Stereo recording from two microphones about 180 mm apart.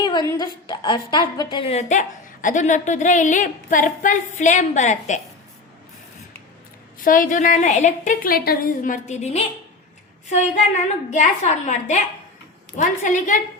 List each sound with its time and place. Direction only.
0.0 s a woman's voice: 25° left (ahead or behind); by 5.2 s 40° left (ahead or behind)
7.0 s a woman's voice: 50° left (ahead or behind)